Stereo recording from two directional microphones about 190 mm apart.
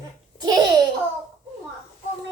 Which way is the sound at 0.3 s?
20° right (ahead or behind).